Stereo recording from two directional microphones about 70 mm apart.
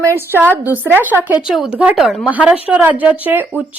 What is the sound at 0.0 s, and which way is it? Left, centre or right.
Speech, right.